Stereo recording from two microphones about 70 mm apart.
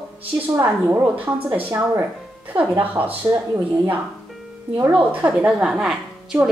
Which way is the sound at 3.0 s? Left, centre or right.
Right.